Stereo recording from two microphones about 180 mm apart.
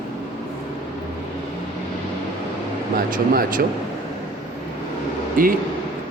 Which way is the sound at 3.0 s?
50° right (ahead or behind).